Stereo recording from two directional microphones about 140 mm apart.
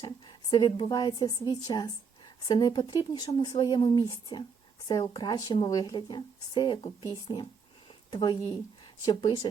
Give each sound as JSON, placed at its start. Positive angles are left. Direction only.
{"t": 0.0, "sound": "a woman's voice", "side_deg": 35}